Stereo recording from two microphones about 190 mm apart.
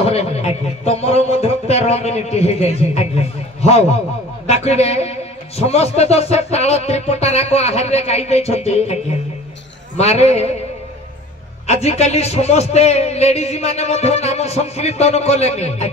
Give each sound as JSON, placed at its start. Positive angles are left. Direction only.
{"t": 0.0, "sound": "a man's voice", "side_deg": 35}
{"t": 9.9, "sound": "a man's voice", "side_deg": 35}
{"t": 11.6, "sound": "a man's voice", "side_deg": 35}